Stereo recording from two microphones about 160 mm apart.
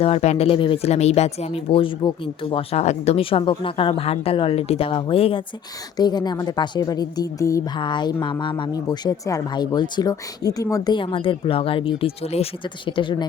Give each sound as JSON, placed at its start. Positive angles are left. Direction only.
{"t": 0.0, "sound": "a woman's voice", "side_deg": 40}